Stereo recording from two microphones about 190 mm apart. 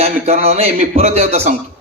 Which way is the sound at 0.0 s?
35° right (ahead or behind).